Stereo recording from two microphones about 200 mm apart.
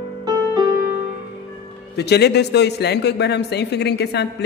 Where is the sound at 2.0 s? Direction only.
55° left (ahead or behind).